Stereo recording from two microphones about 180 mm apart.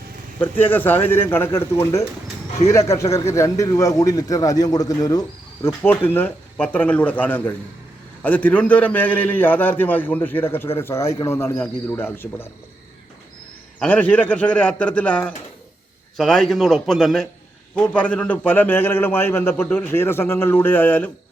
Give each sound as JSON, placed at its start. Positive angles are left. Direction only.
{"t": 0.3, "sound": "a man's voice", "side_deg": 10}
{"t": 13.7, "sound": "a man's voice", "side_deg": 10}